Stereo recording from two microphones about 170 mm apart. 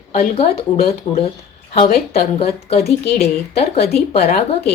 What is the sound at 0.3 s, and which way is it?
A woman's voice, 35° left (ahead or behind).